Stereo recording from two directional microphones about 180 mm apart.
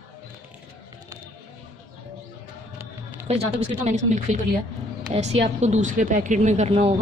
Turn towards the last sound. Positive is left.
turn(degrees=-35)  # may be behind; listen again after turning